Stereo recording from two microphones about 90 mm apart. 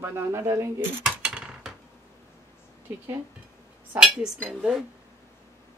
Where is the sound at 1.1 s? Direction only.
10° right (ahead or behind).